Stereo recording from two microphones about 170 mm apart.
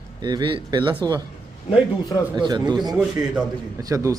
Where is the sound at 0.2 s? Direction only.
25° right (ahead or behind).